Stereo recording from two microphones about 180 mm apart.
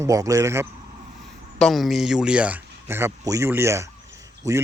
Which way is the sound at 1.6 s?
Centre (ahead or behind).